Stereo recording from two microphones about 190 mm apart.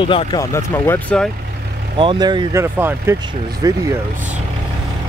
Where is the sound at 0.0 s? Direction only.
25° left (ahead or behind).